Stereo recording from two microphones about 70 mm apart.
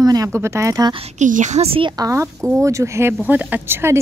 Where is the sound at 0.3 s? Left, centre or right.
Right.